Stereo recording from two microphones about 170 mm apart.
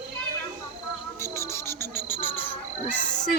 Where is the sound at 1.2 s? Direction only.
15° left (ahead or behind).